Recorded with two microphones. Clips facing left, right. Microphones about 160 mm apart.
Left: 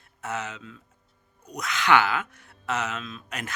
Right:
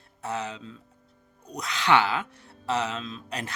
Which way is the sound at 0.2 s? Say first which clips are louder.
Right 1 dB; 30° right (ahead or behind).